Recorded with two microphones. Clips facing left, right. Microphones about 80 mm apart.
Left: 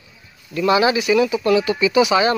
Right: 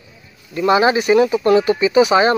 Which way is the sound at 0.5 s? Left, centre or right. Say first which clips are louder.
Right 2 dB; right.